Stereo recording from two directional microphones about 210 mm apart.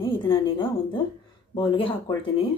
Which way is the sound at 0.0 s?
25° left (ahead or behind).